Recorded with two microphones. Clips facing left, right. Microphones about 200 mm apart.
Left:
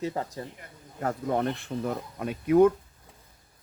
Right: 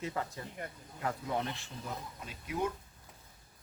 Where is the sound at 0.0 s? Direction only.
35° left (ahead or behind).